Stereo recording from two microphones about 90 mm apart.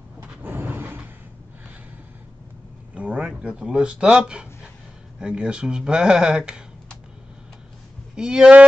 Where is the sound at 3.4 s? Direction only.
10° right (ahead or behind).